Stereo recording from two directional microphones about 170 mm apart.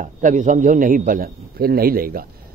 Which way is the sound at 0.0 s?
45° right (ahead or behind).